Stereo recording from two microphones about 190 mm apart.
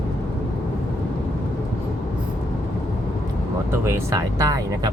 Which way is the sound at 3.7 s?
15° right (ahead or behind).